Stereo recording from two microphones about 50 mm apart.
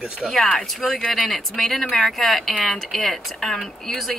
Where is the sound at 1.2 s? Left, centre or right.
Centre.